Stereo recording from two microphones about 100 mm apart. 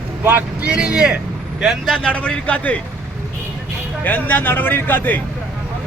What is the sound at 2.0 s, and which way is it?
Speech, 10° left (ahead or behind).